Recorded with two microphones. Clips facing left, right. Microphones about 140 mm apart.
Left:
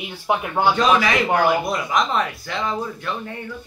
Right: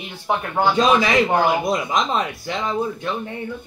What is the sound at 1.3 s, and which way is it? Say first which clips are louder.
Speech: even; 20° right (ahead or behind).